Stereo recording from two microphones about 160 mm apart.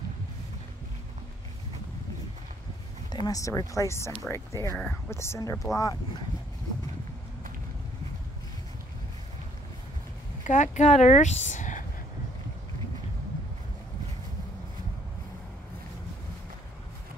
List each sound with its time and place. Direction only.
3.3 s speech: 20° left (ahead or behind)
10.4 s speech: 50° left (ahead or behind)